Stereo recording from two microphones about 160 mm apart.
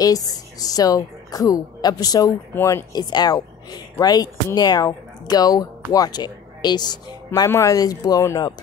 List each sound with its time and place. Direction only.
0.0 s speech: 25° left (ahead or behind)